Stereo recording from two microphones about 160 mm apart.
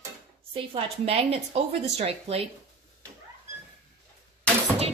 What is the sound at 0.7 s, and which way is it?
A woman's voice, 40° right (ahead or behind).